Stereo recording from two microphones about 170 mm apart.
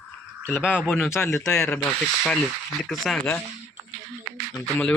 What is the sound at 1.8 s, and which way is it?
Speech, 5° left (ahead or behind).